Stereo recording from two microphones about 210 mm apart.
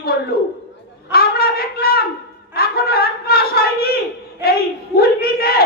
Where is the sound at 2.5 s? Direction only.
45° left (ahead or behind).